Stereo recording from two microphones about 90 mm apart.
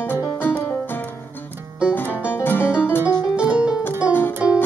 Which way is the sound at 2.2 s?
25° left (ahead or behind).